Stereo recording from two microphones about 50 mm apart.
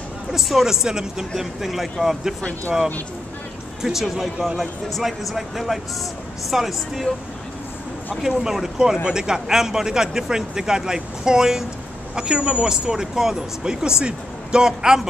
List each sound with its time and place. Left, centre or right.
0.3 s speech: centre
0.8 s speech: centre
3.8 s speech: centre
8.1 s speech: centre